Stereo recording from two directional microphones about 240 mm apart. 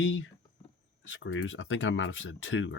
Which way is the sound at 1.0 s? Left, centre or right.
Left.